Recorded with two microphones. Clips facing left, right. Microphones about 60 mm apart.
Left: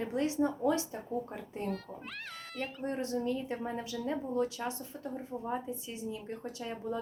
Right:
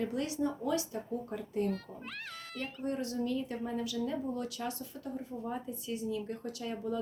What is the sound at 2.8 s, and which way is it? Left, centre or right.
A woman's voice, left.